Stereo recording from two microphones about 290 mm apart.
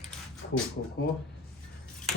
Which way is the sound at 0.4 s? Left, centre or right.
Left.